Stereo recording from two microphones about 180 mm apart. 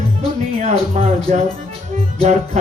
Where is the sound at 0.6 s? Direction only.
40° right (ahead or behind).